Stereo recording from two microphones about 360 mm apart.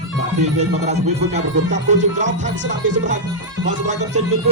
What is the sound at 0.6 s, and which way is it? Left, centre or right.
Speech, centre.